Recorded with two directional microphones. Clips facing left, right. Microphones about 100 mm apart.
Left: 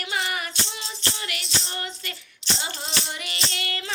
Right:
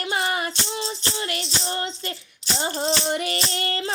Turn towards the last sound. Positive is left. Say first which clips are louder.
# right 5 dB
turn(degrees=-35)  # may be behind; listen again after turning